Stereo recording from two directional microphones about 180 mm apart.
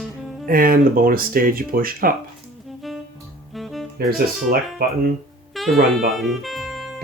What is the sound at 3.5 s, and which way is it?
Music, centre (ahead or behind).